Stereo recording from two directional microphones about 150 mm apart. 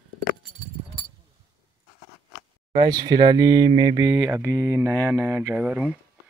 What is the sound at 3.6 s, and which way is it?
Mantra, 35° right (ahead or behind).